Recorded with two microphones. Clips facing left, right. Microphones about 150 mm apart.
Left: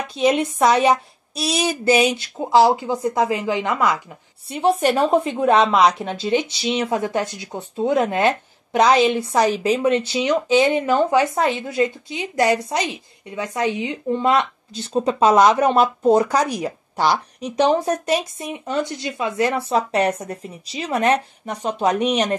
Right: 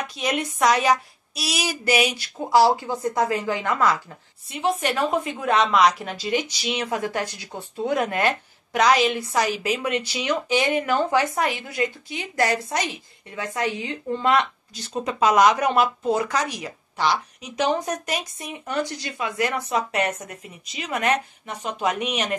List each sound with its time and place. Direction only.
0.0 s speech: 30° left (ahead or behind)
4.6 s speech: 30° left (ahead or behind)